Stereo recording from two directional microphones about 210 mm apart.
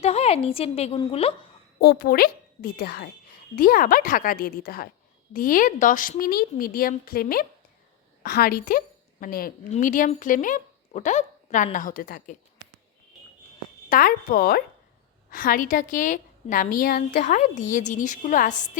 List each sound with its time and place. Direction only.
0.0 s a woman's voice: 30° left (ahead or behind)
1.8 s a woman's voice: 45° left (ahead or behind)
13.9 s a woman's voice: 40° left (ahead or behind)